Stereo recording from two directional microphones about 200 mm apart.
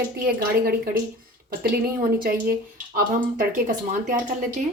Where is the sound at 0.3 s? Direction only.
50° right (ahead or behind).